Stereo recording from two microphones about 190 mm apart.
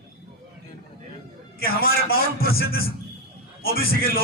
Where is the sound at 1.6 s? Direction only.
50° left (ahead or behind).